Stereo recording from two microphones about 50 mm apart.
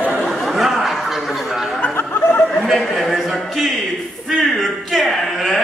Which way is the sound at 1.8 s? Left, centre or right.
Left.